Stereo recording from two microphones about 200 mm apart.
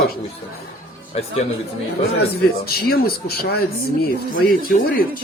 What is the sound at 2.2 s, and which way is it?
A man's voice, 50° left (ahead or behind).